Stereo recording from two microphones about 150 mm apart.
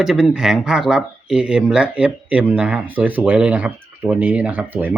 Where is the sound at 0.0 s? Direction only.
5° right (ahead or behind).